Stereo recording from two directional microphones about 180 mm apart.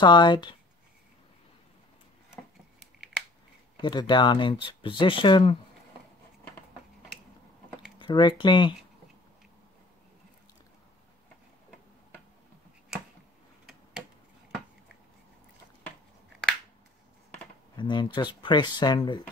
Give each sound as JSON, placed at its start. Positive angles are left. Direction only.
{"t": 0.0, "sound": "speech", "side_deg": 25}
{"t": 3.7, "sound": "speech", "side_deg": 25}
{"t": 8.0, "sound": "speech", "side_deg": 25}
{"t": 17.7, "sound": "speech", "side_deg": 25}